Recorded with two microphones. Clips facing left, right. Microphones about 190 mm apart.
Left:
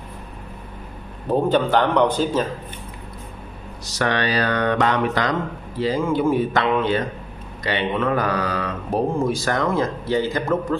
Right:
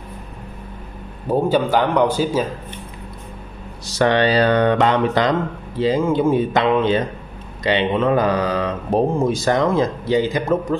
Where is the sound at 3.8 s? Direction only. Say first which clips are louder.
Right 6 dB; 25° right (ahead or behind).